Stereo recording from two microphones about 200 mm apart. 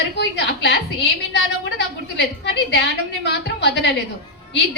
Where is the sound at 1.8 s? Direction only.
60° left (ahead or behind).